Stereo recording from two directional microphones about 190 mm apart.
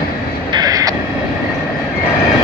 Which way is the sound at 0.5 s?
20° right (ahead or behind).